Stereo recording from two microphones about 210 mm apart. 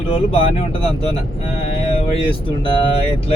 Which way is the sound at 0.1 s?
25° left (ahead or behind).